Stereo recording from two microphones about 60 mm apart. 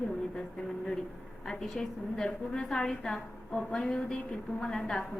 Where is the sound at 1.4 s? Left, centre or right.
Centre.